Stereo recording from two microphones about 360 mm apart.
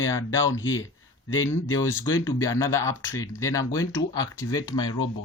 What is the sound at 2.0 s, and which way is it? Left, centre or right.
Speech, centre.